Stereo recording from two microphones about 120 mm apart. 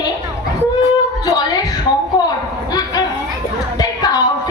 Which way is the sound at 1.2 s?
30° left (ahead or behind).